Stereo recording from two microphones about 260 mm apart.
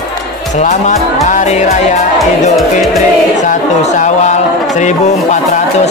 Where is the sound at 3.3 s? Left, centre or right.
Left.